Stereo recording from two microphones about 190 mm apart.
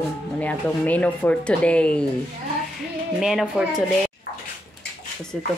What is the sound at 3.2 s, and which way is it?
Speech, 5° right (ahead or behind).